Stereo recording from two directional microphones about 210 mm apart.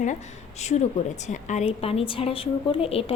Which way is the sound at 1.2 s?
35° left (ahead or behind).